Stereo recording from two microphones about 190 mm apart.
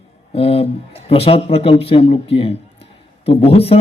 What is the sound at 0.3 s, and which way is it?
Speech, 30° left (ahead or behind).